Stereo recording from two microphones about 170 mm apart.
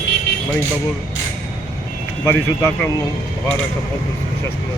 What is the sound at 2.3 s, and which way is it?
Speech, 15° left (ahead or behind).